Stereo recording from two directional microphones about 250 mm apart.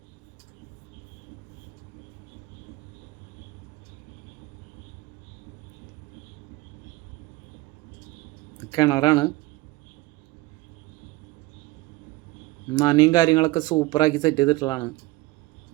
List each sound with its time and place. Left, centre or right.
8.7 s speech: centre
12.7 s speech: centre